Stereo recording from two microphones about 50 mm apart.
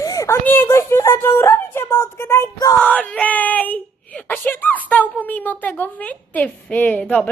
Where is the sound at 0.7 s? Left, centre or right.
Left.